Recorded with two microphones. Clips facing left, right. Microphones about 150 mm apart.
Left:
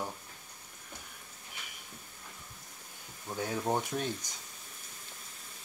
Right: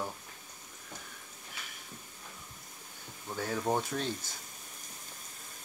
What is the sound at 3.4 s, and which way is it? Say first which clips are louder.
Speech: even; 15° left (ahead or behind).